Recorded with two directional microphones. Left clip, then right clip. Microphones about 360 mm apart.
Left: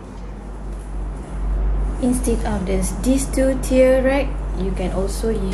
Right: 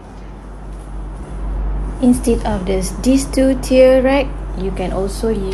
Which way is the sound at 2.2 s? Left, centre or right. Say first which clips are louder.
Right 5 dB; right.